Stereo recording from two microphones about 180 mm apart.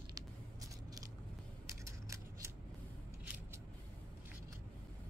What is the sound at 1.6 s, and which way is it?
Scissors, 15° right (ahead or behind).